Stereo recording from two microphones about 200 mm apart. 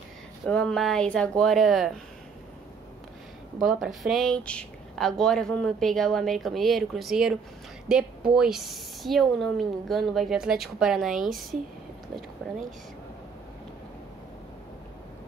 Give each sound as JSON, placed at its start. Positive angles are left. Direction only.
{"t": 0.5, "sound": "speech", "side_deg": 5}
{"t": 3.6, "sound": "speech", "side_deg": 0}